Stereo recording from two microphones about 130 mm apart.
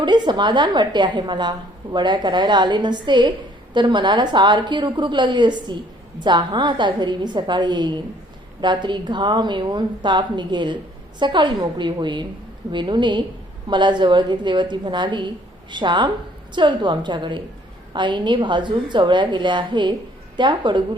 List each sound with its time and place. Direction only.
0.0 s a woman's voice: 35° right (ahead or behind)